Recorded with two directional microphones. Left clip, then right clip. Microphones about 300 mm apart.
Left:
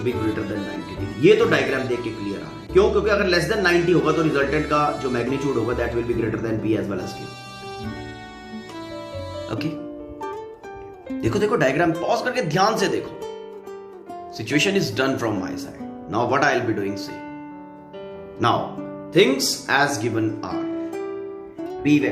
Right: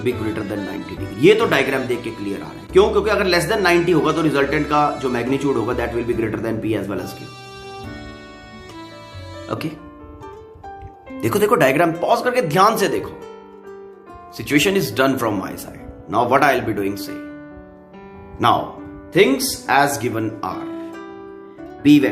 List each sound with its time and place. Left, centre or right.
0.5 s music: centre
1.2 s a man's voice: right
9.5 s a man's voice: centre
11.2 s a man's voice: right
14.3 s a man's voice: right
18.4 s a man's voice: centre
21.8 s speech: right